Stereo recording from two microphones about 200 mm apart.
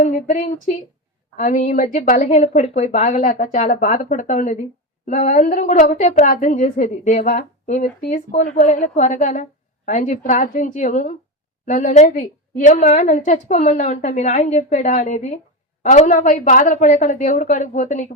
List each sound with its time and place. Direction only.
0.0 s a woman's voice: 40° left (ahead or behind)